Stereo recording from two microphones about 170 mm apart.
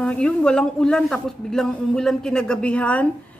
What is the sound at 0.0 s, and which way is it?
A man's voice, 5° left (ahead or behind).